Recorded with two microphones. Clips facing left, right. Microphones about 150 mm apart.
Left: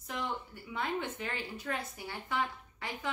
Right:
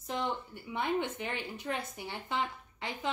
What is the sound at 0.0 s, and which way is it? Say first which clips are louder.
A woman's voice: right 3 dB; 25° right (ahead or behind).